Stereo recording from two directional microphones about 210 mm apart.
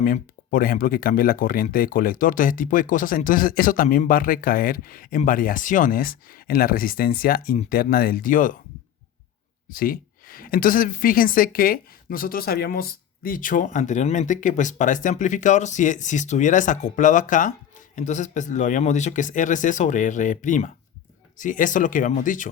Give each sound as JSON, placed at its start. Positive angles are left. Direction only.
{"t": 0.0, "sound": "speech", "side_deg": 40}
{"t": 9.6, "sound": "speech", "side_deg": 40}